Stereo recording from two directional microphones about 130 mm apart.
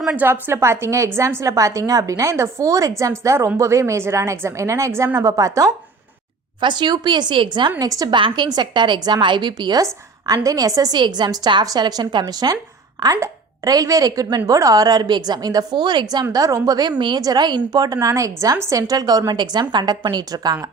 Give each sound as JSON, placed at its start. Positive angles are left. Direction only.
{"t": 0.0, "sound": "a woman's voice", "side_deg": -5}
{"t": 0.3, "sound": "a woman's voice", "side_deg": -20}
{"t": 6.6, "sound": "a woman's voice", "side_deg": -35}